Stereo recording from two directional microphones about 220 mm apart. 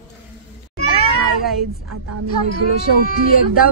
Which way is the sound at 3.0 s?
40° left (ahead or behind).